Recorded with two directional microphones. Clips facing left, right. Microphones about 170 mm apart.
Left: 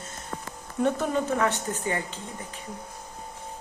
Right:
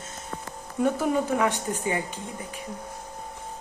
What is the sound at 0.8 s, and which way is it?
Speech, 5° right (ahead or behind).